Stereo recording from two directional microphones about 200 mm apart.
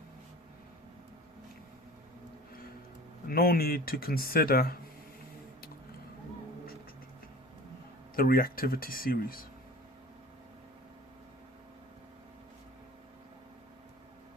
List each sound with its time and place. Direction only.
3.2 s speech: 50° left (ahead or behind)
8.1 s speech: 45° left (ahead or behind)